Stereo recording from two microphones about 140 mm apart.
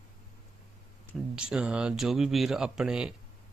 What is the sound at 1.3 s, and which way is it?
A man's voice, 5° right (ahead or behind).